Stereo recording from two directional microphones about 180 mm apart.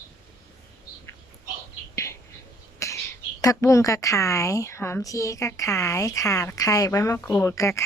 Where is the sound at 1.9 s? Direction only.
15° left (ahead or behind).